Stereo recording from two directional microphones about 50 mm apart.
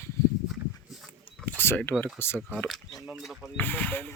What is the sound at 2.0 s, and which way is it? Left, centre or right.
Speech, left.